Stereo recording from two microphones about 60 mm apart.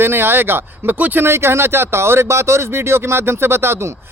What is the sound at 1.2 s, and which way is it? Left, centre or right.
Speech, right.